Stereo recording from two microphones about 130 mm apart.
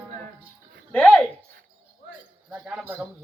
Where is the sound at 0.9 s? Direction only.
5° left (ahead or behind).